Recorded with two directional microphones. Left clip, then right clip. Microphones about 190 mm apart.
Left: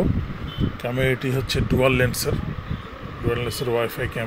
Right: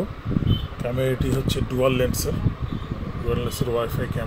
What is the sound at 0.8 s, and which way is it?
Speech, 10° left (ahead or behind).